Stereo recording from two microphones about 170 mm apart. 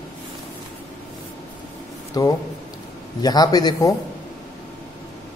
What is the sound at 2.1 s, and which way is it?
Speech, 25° left (ahead or behind).